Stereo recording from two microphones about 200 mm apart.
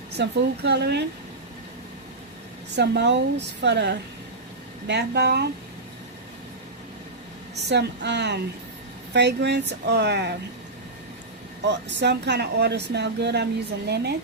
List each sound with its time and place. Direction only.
0.1 s speech: 55° right (ahead or behind)
2.7 s speech: 60° right (ahead or behind)
7.5 s speech: 60° right (ahead or behind)
11.6 s speech: 60° right (ahead or behind)